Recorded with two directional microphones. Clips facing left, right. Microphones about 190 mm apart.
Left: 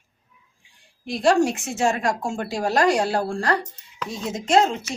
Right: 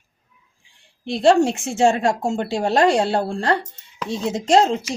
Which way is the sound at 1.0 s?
25° right (ahead or behind).